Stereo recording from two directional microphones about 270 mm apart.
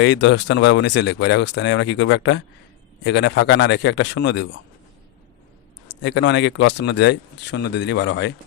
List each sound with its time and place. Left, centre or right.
0.0 s speech: left
6.0 s speech: left